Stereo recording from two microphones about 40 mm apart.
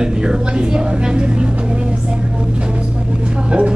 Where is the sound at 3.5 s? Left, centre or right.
Right.